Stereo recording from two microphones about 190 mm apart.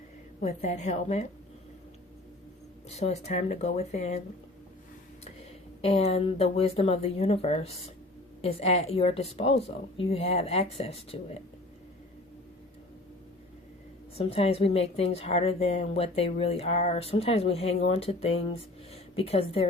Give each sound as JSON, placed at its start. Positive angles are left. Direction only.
{"t": 0.4, "sound": "a woman's voice", "side_deg": 35}
{"t": 2.9, "sound": "a woman's voice", "side_deg": 35}
{"t": 5.2, "sound": "a woman's voice", "side_deg": 30}
{"t": 14.2, "sound": "a woman's voice", "side_deg": 30}